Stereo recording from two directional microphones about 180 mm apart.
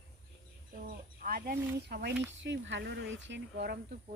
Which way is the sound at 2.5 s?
85° right.